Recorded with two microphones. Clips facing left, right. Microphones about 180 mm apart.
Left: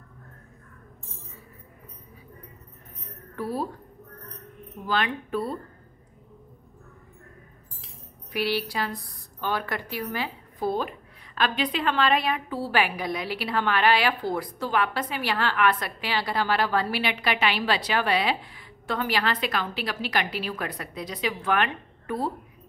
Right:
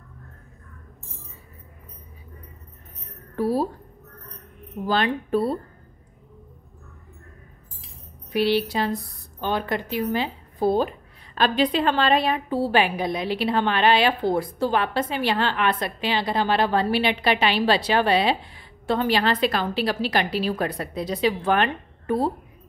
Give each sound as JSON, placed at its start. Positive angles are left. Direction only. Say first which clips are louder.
{"t": 3.3, "sound": "speech", "louder": "right 7 dB", "side_deg": -30}
{"t": 4.8, "sound": "speech", "louder": "right 4 dB", "side_deg": -30}
{"t": 8.3, "sound": "speech", "louder": "right 6 dB", "side_deg": -25}